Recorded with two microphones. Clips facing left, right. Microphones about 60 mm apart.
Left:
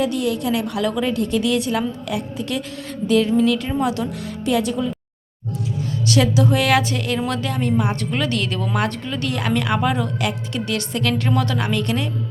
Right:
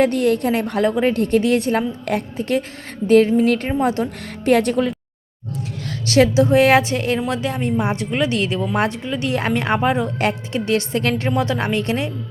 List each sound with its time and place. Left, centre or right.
0.0 s a woman's voice: right
4.4 s speech: right
5.6 s music: right
6.1 s a woman's voice: right